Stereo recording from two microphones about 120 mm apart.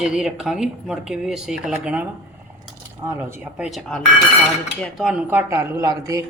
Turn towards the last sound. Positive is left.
turn(degrees=-30)  # may be behind; listen again after turning